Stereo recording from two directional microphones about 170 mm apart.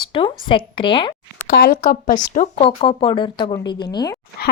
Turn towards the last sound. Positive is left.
turn(degrees=25)  # may be behind; listen again after turning